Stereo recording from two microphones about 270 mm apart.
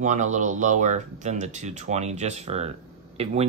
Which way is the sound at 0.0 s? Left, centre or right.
Right.